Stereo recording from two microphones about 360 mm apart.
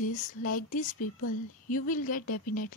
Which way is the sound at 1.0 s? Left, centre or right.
Left.